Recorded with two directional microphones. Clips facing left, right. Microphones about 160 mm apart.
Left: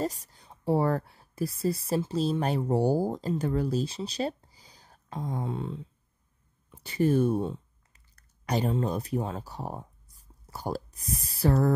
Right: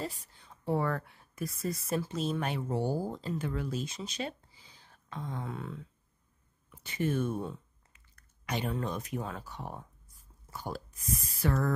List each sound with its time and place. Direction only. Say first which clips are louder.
0.0 s speech: left 7 dB; 40° left (ahead or behind)
5.4 s speech: left 6 dB; 25° left (ahead or behind)
7.9 s a sound: even; 35° left (ahead or behind)
8.7 s speech: left 6 dB; 35° left (ahead or behind)